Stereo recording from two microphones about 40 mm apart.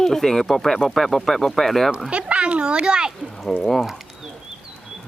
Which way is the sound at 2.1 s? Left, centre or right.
Right.